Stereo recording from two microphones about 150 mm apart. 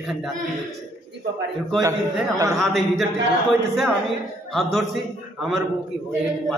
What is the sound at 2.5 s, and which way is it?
Speech, centre (ahead or behind).